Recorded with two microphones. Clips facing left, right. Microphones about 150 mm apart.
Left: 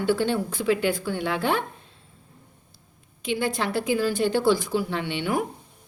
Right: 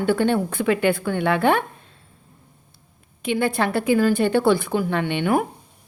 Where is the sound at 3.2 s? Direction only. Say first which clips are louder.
Right 4 dB; 55° right (ahead or behind).